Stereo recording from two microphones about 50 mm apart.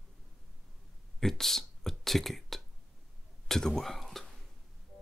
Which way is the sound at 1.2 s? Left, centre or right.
Centre.